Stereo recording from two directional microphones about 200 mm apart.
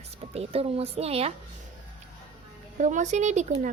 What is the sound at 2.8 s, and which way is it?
Speech, 35° right (ahead or behind).